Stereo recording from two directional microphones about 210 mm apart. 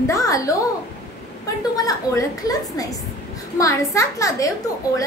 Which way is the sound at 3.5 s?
15° left (ahead or behind).